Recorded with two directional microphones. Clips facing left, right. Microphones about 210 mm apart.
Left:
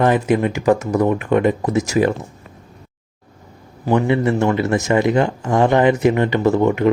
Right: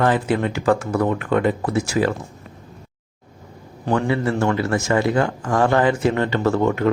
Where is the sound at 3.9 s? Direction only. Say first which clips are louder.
Left 4 dB; 20° left (ahead or behind).